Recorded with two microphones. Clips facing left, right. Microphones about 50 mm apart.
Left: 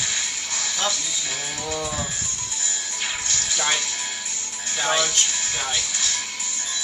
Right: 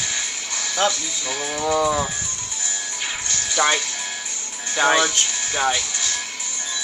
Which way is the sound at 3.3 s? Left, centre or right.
Centre.